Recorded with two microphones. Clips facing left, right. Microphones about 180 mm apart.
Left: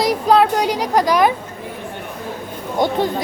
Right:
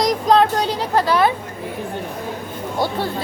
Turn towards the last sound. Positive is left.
turn(degrees=20)  # may be behind; listen again after turning